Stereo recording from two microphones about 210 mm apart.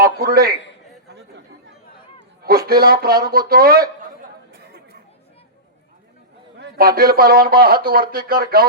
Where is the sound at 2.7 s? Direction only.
45° right (ahead or behind).